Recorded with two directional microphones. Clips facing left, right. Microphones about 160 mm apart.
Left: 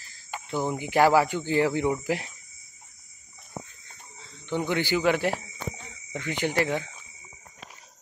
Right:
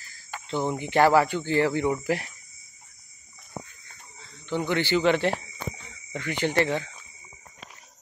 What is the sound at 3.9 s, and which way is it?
Snake, 20° left (ahead or behind).